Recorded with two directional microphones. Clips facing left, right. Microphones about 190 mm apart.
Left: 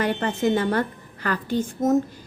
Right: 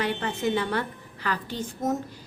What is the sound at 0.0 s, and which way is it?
Speech, 45° left (ahead or behind).